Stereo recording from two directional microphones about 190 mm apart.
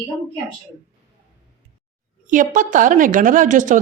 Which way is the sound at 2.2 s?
45° right (ahead or behind).